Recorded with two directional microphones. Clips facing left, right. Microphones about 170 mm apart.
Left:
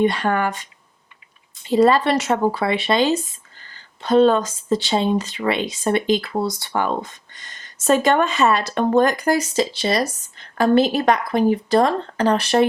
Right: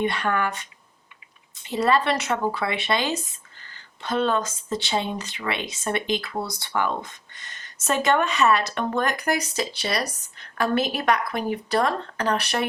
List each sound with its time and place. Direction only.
0.0 s speech: 35° left (ahead or behind)
1.6 s speech: 30° left (ahead or behind)